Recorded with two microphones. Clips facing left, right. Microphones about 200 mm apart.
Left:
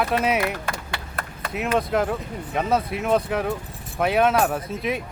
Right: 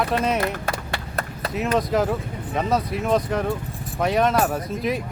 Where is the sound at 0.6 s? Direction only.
40° right (ahead or behind).